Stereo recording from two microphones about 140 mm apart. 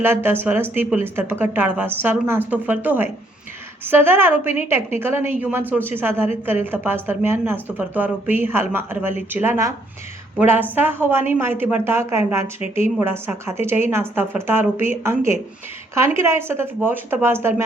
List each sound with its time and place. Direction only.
0.0 s a woman's voice: 15° right (ahead or behind)